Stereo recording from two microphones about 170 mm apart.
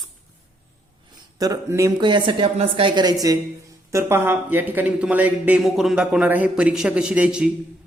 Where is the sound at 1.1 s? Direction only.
20° right (ahead or behind); by 7.5 s 5° right (ahead or behind).